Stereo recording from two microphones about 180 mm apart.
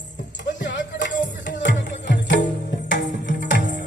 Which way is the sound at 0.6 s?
75° left (ahead or behind).